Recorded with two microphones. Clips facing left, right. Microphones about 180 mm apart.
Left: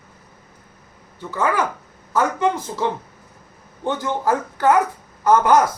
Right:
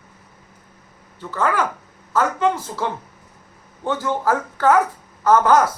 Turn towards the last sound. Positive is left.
turn(degrees=10)  # may be behind; listen again after turning